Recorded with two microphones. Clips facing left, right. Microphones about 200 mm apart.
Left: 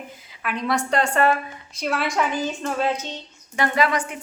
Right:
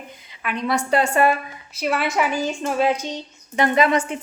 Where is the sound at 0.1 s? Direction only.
Centre (ahead or behind).